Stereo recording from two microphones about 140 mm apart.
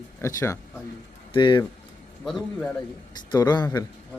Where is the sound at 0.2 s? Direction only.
20° left (ahead or behind).